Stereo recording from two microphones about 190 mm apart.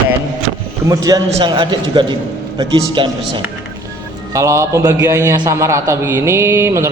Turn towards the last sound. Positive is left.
turn(degrees=-15)  # may be behind; listen again after turning